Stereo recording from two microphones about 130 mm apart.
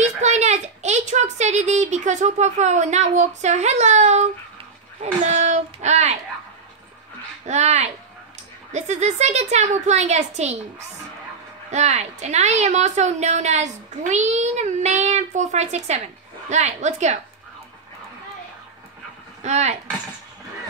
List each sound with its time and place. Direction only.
0.0 s a woman's voice: 60° right (ahead or behind)
7.4 s a woman's voice: 60° right (ahead or behind)
19.4 s a woman's voice: 60° right (ahead or behind)